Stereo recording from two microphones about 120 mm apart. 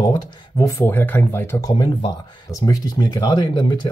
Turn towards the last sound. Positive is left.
turn(degrees=35)  # may be behind; listen again after turning